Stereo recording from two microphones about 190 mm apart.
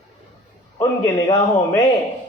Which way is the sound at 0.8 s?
20° left (ahead or behind).